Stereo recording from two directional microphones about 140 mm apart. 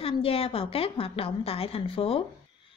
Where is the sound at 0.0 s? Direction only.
40° left (ahead or behind).